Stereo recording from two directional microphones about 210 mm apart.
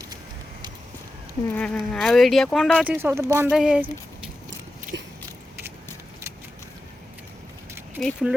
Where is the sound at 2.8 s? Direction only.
10° right (ahead or behind).